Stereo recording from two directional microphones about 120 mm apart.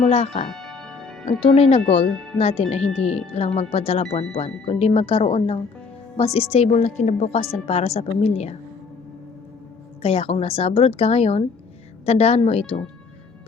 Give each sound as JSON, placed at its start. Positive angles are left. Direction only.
{"t": 0.1, "sound": "speech", "side_deg": 55}
{"t": 0.5, "sound": "music", "side_deg": 0}
{"t": 1.4, "sound": "speech", "side_deg": 55}
{"t": 2.0, "sound": "speech", "side_deg": 5}
{"t": 2.4, "sound": "speech", "side_deg": 55}
{"t": 10.0, "sound": "speech", "side_deg": 55}